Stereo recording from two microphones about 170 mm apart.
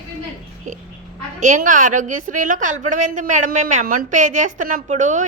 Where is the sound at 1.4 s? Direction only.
50° right (ahead or behind).